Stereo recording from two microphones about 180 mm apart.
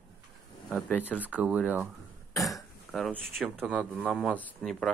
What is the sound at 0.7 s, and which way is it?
Speech, 5° left (ahead or behind).